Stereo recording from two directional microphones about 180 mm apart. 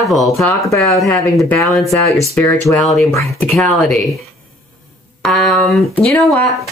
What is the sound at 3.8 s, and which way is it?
Speech, centre (ahead or behind).